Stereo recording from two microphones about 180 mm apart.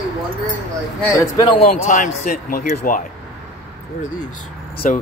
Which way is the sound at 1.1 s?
20° left (ahead or behind).